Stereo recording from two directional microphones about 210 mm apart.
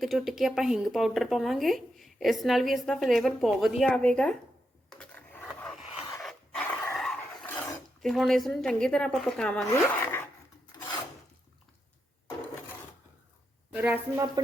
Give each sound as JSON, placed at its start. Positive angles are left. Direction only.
{"t": 0.0, "sound": "a woman's voice", "side_deg": 0}
{"t": 4.9, "sound": "dog", "side_deg": 5}
{"t": 8.0, "sound": "a woman's voice", "side_deg": 0}
{"t": 10.7, "sound": "filing", "side_deg": 15}
{"t": 13.7, "sound": "a woman's voice", "side_deg": -5}
{"t": 14.4, "sound": "speech", "side_deg": -20}